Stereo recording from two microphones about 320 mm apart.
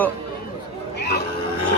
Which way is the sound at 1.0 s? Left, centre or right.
Left.